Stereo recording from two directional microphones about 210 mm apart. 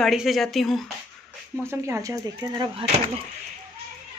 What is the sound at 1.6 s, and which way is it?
Speech, 10° right (ahead or behind).